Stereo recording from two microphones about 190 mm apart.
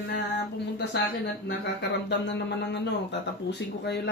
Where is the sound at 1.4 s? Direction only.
65° left (ahead or behind).